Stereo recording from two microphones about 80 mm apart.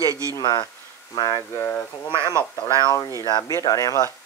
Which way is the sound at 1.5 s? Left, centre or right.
Left.